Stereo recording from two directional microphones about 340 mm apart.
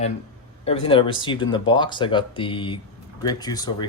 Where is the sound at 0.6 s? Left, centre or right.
Centre.